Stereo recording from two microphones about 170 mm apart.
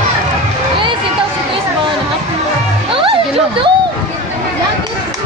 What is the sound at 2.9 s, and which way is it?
Music, 30° right (ahead or behind).